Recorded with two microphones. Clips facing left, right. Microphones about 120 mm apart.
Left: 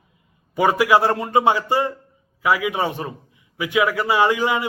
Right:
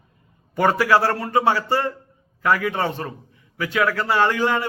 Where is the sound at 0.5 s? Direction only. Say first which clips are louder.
Left 1 dB; 10° left (ahead or behind).